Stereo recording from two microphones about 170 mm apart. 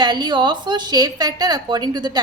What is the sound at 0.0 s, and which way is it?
A woman's voice, 25° right (ahead or behind).